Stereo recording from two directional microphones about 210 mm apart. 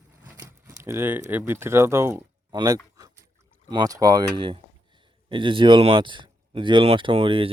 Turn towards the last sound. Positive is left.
turn(degrees=-25)  # may be behind; listen again after turning